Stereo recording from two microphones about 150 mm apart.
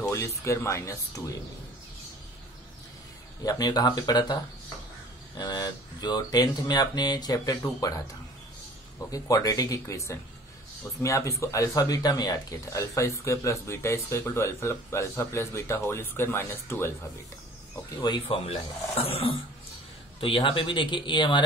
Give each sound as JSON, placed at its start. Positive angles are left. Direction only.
{"t": 0.0, "sound": "a sound", "side_deg": 20}
{"t": 0.4, "sound": "speech", "side_deg": 20}
{"t": 3.4, "sound": "speech", "side_deg": 25}
{"t": 5.4, "sound": "speech", "side_deg": 30}
{"t": 9.1, "sound": "speech", "side_deg": 25}
{"t": 18.0, "sound": "speech", "side_deg": 30}
{"t": 18.4, "sound": "speech", "side_deg": 40}